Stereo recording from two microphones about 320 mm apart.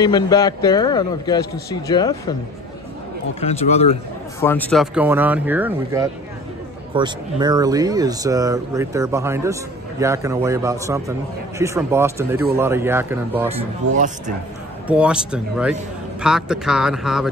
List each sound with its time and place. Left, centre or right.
0.0 s a man's voice: centre
3.3 s speech: centre
4.4 s speech: centre
13.5 s speech: right
14.9 s speech: centre